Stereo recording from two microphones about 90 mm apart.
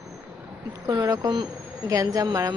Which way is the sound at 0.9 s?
50° right (ahead or behind).